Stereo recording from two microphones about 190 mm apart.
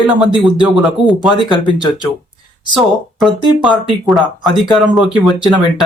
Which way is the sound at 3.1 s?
Centre (ahead or behind).